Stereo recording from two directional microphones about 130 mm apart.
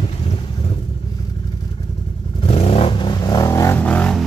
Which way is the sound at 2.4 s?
50° left (ahead or behind).